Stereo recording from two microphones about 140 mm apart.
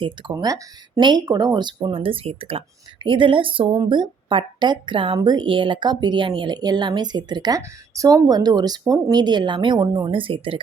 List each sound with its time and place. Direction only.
0.0 s speech: 35° right (ahead or behind)